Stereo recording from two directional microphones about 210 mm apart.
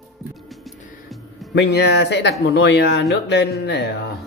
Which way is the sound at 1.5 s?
55° left (ahead or behind).